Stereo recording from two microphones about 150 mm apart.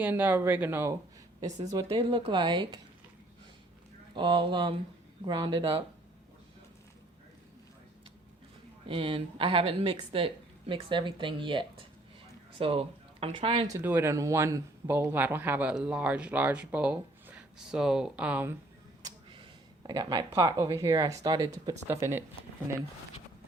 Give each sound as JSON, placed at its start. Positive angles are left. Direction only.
{"t": 0.0, "sound": "speech", "side_deg": -10}
{"t": 1.7, "sound": "a woman's voice", "side_deg": -30}
{"t": 4.1, "sound": "a woman's voice", "side_deg": -30}
{"t": 8.9, "sound": "a woman's voice", "side_deg": -40}
{"t": 13.7, "sound": "speech", "side_deg": -15}
{"t": 19.9, "sound": "speech", "side_deg": -25}